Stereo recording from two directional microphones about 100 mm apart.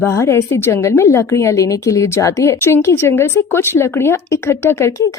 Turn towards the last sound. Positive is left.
turn(degrees=25)  # may be behind; listen again after turning